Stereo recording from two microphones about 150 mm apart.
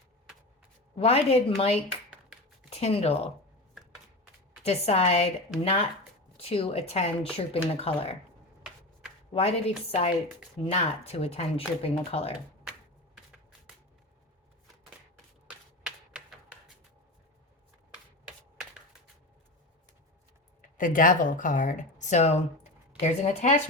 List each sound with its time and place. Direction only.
0.9 s speech: 40° left (ahead or behind)
4.6 s speech: 45° left (ahead or behind)
9.3 s speech: 40° left (ahead or behind)
15.4 s typewriter: 5° right (ahead or behind)
20.6 s speech: 60° left (ahead or behind)